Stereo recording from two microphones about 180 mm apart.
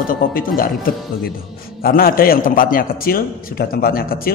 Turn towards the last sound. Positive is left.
turn(degrees=55)  # may be behind; listen again after turning